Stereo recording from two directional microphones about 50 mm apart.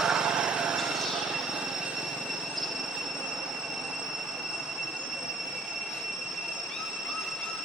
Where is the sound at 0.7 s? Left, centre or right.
Centre.